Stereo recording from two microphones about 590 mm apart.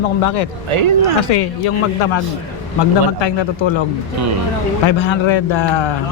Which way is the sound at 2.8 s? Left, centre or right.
Left.